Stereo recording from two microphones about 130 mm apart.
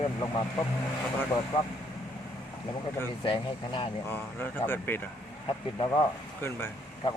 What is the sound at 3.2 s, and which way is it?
Speech, 40° left (ahead or behind).